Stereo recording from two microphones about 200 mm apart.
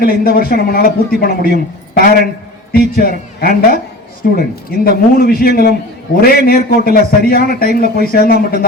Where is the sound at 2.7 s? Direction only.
50° left (ahead or behind).